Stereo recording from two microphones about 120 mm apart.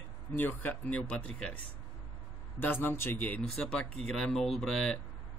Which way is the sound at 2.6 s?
15° left (ahead or behind).